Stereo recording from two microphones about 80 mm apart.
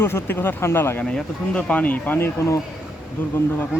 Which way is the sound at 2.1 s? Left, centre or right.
Left.